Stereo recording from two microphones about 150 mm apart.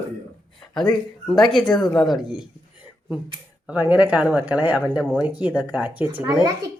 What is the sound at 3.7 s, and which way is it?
Speech, 10° right (ahead or behind).